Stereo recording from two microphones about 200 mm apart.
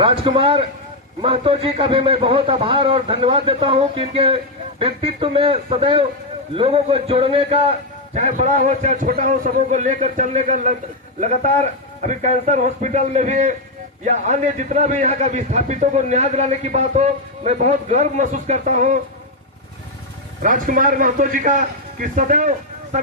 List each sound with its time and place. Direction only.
0.0 s a man's voice: 25° right (ahead or behind)
20.4 s a man's voice: 40° right (ahead or behind)